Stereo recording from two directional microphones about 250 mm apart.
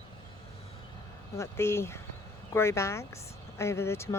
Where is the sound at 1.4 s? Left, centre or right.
Centre.